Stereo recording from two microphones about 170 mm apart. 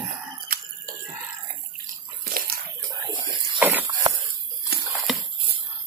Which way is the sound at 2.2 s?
60° right (ahead or behind).